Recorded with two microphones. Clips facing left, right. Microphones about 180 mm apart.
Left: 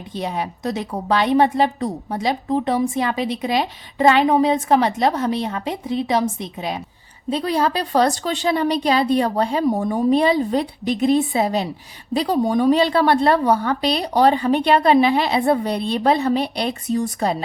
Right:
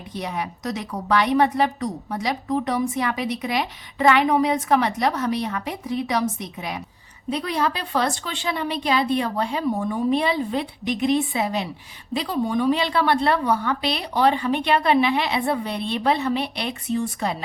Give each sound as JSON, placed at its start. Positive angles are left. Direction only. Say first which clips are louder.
{"t": 0.1, "sound": "a woman's voice", "louder": "left 3 dB", "side_deg": 30}